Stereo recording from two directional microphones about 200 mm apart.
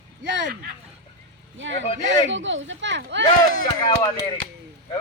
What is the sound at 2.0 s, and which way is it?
Speech, 65° right (ahead or behind).